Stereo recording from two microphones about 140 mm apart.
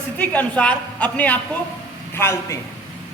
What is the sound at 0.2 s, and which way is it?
A man's voice, 10° left (ahead or behind).